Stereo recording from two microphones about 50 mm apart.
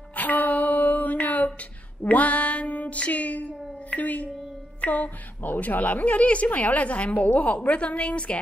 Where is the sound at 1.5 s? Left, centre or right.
Left.